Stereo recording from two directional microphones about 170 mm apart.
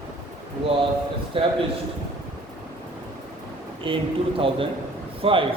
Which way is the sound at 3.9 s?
30° right (ahead or behind).